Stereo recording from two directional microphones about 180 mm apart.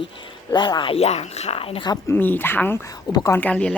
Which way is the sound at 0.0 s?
25° left (ahead or behind).